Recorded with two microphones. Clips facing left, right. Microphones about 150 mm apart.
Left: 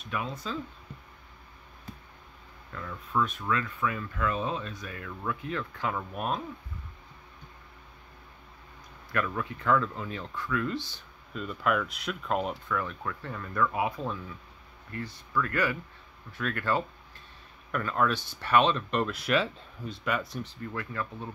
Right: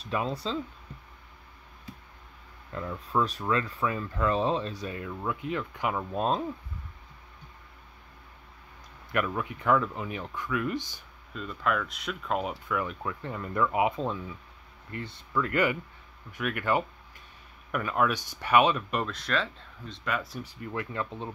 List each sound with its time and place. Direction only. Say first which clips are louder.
0.0 s speech: right 4 dB; 35° right (ahead or behind)
2.7 s speech: right 2 dB; 25° right (ahead or behind)
6.1 s speech: right 4 dB; 25° right (ahead or behind)
9.1 s speech: right 2 dB; 15° right (ahead or behind)
11.3 s speech: left 1 dB; 5° left (ahead or behind)
19.0 s speech: left 3 dB; 10° left (ahead or behind)
20.7 s speech: right 3 dB; 20° right (ahead or behind)